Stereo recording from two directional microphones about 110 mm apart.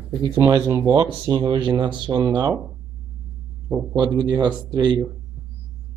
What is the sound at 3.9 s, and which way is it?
Speech, 45° right (ahead or behind).